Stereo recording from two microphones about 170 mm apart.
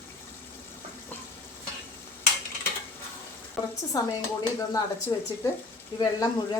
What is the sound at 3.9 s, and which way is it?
Speech, 20° left (ahead or behind).